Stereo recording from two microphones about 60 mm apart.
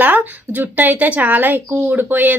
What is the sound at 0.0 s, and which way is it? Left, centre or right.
A woman's voice, right.